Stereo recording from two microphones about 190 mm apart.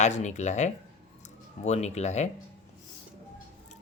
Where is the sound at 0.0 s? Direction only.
35° left (ahead or behind).